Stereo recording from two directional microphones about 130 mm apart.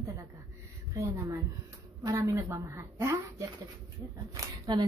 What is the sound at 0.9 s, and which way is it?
A woman's voice, 25° right (ahead or behind).